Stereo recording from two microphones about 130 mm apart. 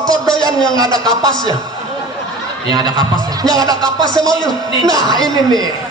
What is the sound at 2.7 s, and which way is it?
A man's voice, 35° right (ahead or behind).